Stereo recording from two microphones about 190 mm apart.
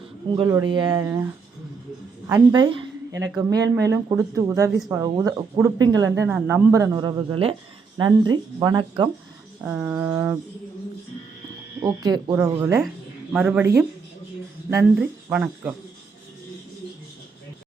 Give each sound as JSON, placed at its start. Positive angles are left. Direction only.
{"t": 0.3, "sound": "speech", "side_deg": -20}
{"t": 2.3, "sound": "speech", "side_deg": -20}
{"t": 6.1, "sound": "speech", "side_deg": -10}
{"t": 9.6, "sound": "speech", "side_deg": -10}
{"t": 12.0, "sound": "speech", "side_deg": -20}
{"t": 14.9, "sound": "speech", "side_deg": -5}